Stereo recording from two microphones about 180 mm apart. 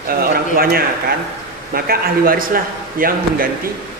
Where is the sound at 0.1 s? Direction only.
55° right (ahead or behind).